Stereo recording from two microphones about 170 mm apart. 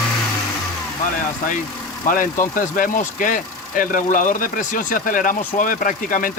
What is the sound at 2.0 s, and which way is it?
Speech, 55° left (ahead or behind).